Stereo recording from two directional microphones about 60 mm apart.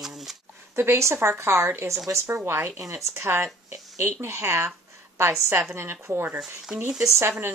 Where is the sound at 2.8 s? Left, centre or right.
Right.